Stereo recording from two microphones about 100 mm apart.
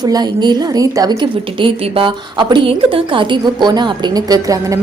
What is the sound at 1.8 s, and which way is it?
Speech, 75° right (ahead or behind).